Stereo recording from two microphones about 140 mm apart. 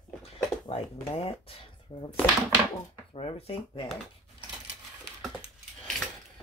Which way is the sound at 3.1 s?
40° left (ahead or behind).